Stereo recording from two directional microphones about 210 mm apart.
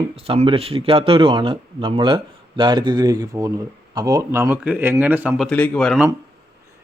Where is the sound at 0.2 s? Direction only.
25° right (ahead or behind); by 5.5 s 10° right (ahead or behind).